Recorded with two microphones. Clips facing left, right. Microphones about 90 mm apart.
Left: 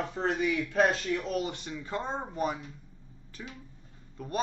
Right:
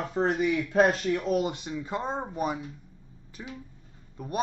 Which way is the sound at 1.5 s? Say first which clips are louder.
Right 3 dB; 10° right (ahead or behind).